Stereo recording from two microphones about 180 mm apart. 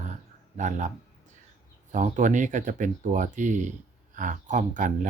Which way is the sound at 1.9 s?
45° right (ahead or behind).